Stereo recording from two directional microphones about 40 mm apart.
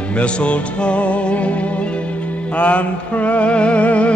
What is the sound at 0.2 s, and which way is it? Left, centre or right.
Music, left.